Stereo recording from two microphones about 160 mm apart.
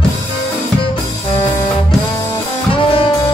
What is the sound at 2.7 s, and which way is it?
Music, 35° left (ahead or behind).